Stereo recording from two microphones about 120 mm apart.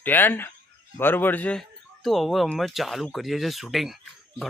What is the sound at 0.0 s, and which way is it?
A man's voice, 15° left (ahead or behind).